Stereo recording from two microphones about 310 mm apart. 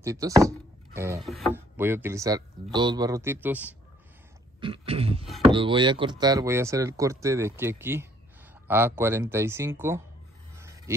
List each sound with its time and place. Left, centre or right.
0.0 s speech: centre
4.6 s speech: centre
10.5 s a sound: centre